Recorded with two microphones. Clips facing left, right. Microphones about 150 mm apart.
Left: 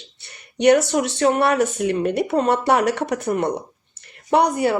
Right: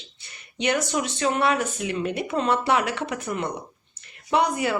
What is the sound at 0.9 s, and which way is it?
Speech, 55° left (ahead or behind).